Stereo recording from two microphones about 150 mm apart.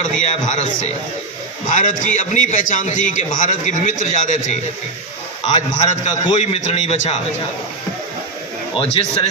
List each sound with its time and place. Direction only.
0.0 s a man's voice: 55° left (ahead or behind)
5.5 s a man's voice: 50° left (ahead or behind)
8.7 s a man's voice: 40° left (ahead or behind)